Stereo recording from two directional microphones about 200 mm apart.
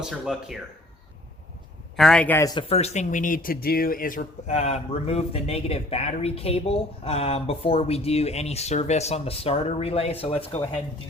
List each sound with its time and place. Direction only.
0.0 s speech: 5° right (ahead or behind)
2.0 s speech: 5° left (ahead or behind); by 10.7 s 30° left (ahead or behind)